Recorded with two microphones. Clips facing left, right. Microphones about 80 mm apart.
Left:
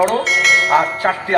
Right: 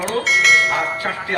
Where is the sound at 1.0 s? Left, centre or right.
Left.